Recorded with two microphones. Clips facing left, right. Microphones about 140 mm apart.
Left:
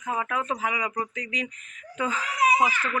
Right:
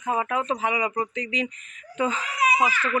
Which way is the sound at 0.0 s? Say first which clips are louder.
Right 3 dB; 20° right (ahead or behind).